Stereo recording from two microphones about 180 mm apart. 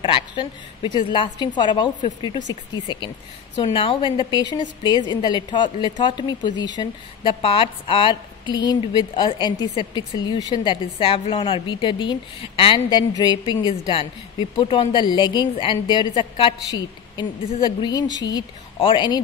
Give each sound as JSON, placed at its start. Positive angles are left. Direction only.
{"t": 0.0, "sound": "speech", "side_deg": 30}